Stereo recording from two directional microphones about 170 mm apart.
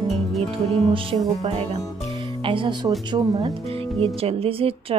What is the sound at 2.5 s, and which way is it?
Speech, 30° right (ahead or behind).